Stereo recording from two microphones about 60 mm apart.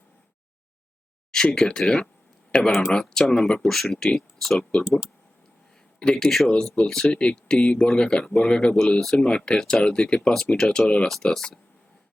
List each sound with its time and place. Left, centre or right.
1.3 s speech: centre
4.8 s speech: centre
6.0 s speech: centre